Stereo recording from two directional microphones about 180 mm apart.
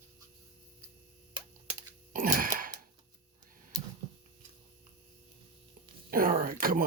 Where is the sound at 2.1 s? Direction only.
50° right (ahead or behind).